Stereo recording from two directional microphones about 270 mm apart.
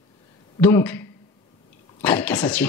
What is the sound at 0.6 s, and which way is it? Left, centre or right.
A woman's voice, centre.